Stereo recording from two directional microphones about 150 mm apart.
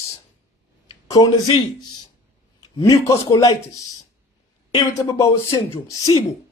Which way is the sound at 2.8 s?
20° left (ahead or behind).